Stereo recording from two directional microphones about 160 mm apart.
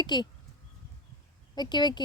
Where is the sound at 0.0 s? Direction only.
25° left (ahead or behind).